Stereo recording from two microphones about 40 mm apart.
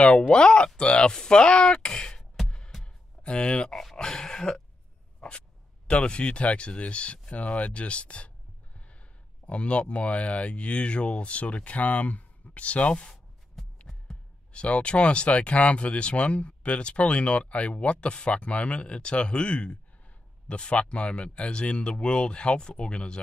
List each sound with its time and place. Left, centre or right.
0.0 s speech: left
3.3 s speech: left
3.6 s speech: centre
5.9 s speech: left
9.5 s speech: left
13.6 s music: centre
14.5 s speech: left